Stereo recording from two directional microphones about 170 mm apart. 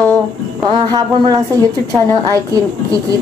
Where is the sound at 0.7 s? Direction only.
25° right (ahead or behind).